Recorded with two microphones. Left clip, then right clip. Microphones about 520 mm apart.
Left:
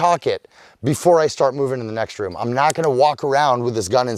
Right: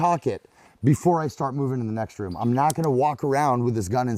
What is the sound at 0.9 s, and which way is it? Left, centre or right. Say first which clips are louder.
Speech: left 8 dB; left.